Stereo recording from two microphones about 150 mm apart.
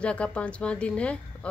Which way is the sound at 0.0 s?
5° left (ahead or behind).